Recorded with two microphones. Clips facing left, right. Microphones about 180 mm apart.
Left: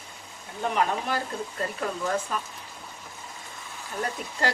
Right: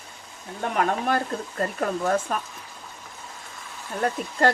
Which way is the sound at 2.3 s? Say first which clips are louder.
Right 3 dB; 50° right (ahead or behind).